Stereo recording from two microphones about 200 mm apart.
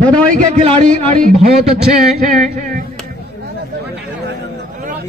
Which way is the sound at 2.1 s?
40° right (ahead or behind).